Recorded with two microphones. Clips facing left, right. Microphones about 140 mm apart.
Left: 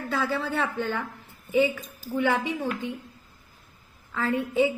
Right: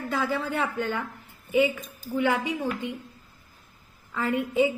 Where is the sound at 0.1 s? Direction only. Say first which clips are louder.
Even; 10° right (ahead or behind).